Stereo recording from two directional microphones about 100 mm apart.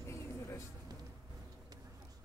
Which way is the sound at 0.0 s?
30° left (ahead or behind).